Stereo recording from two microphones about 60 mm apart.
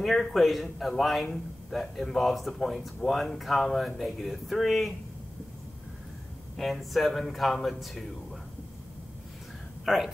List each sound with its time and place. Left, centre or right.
0.0 s speech: centre
6.5 s speech: centre
9.8 s speech: centre